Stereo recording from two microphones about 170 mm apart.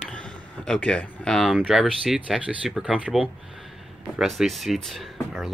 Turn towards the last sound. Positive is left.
turn(degrees=0)  # may be behind; listen again after turning